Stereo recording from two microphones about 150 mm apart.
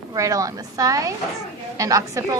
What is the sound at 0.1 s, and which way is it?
A woman's voice, 20° right (ahead or behind).